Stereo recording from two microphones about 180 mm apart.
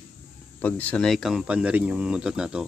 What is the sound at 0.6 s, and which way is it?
Speech, 10° left (ahead or behind).